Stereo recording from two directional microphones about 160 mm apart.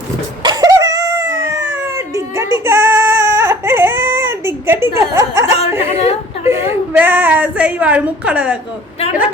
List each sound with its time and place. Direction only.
0.4 s a sound: 25° right (ahead or behind)
6.0 s speech: 40° left (ahead or behind)
6.5 s a woman's voice: 15° right (ahead or behind)